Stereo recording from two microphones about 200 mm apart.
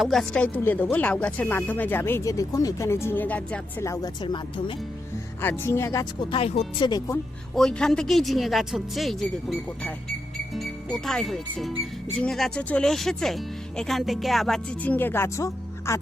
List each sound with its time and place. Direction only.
0.0 s speech: centre (ahead or behind); by 4.8 s 25° left (ahead or behind)
5.4 s speech: 10° left (ahead or behind)
6.3 s speech: 30° left (ahead or behind)
7.5 s speech: 5° left (ahead or behind)